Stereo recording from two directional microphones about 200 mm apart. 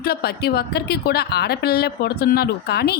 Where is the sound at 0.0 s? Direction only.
50° left (ahead or behind).